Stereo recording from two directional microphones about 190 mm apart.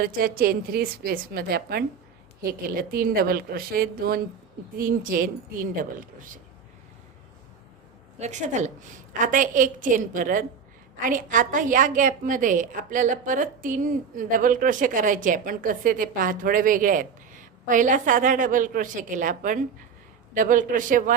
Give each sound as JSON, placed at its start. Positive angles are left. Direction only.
{"t": 0.0, "sound": "a woman's voice", "side_deg": -50}
{"t": 8.2, "sound": "a woman's voice", "side_deg": -40}